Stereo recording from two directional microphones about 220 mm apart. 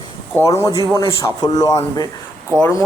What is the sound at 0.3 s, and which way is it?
A man's voice, 10° left (ahead or behind).